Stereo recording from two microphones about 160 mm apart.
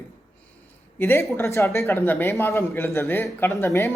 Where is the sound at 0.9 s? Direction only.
15° left (ahead or behind).